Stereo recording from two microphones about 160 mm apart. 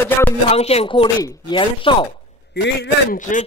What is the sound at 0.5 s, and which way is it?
Speech, 40° left (ahead or behind).